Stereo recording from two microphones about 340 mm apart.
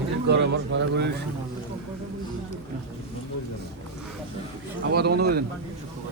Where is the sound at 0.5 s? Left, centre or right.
Right.